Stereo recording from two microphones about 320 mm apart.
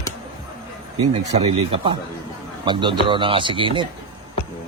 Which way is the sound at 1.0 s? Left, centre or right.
Centre.